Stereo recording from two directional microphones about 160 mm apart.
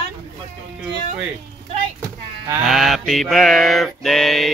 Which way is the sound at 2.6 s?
Centre (ahead or behind).